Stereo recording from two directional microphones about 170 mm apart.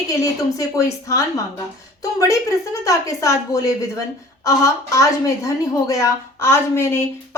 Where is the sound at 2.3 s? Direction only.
20° left (ahead or behind).